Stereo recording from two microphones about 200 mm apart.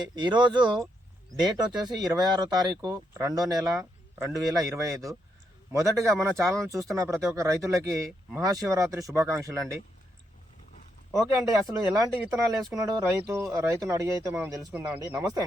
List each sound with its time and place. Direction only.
0.0 s speech: 20° right (ahead or behind)
2.0 s speech: 20° right (ahead or behind)
11.3 s speech: 15° right (ahead or behind)